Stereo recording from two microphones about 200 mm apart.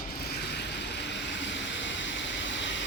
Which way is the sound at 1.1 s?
65° left (ahead or behind).